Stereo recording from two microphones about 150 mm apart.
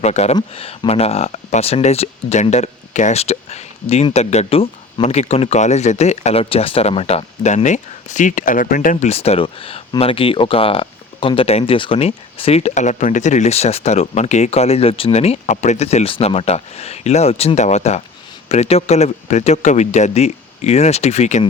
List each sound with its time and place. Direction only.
0.0 s speech: 45° left (ahead or behind)